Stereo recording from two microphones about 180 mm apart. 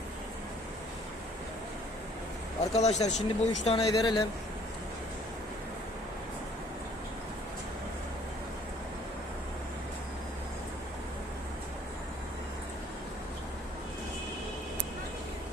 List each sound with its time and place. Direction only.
2.7 s speech: 40° left (ahead or behind)
3.8 s speech: 25° left (ahead or behind)